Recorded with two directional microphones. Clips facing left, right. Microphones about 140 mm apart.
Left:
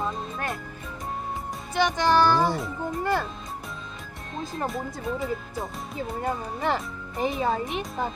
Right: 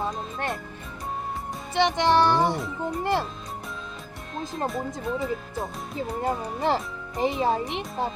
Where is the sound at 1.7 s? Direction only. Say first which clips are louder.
Right 1 dB; 25° right (ahead or behind).